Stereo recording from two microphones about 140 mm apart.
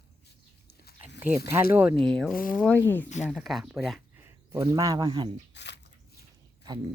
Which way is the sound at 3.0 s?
55° left (ahead or behind).